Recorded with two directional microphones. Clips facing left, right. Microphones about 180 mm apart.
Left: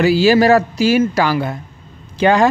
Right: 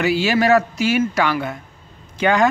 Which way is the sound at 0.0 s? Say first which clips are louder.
Left 6 dB; 35° left (ahead or behind).